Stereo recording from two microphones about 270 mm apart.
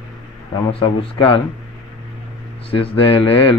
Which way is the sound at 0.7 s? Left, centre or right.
Centre.